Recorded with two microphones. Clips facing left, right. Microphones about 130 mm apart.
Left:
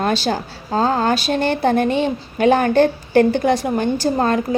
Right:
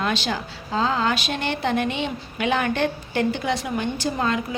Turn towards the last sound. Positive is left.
turn(degrees=45)  # may be behind; listen again after turning